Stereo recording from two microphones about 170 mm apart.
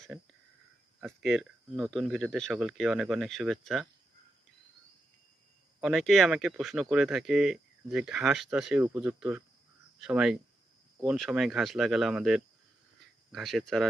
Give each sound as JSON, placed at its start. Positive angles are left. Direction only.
{"t": 0.1, "sound": "speech", "side_deg": -10}
{"t": 5.8, "sound": "speech", "side_deg": 0}